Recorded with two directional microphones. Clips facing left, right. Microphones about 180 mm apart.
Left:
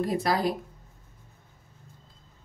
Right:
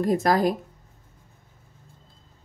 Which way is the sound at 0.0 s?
45° right (ahead or behind).